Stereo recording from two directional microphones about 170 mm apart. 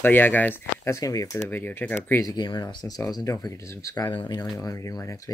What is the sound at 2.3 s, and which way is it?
Speech, 25° left (ahead or behind).